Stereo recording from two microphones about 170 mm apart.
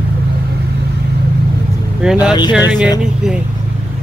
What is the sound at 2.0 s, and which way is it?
Speech, 5° right (ahead or behind).